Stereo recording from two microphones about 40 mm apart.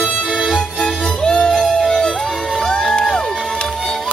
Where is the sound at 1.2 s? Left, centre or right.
Left.